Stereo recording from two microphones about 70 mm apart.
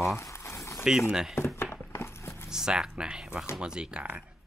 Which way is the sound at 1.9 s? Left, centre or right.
Left.